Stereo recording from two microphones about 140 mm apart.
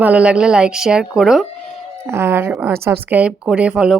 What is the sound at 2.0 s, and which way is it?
Speech, 15° right (ahead or behind).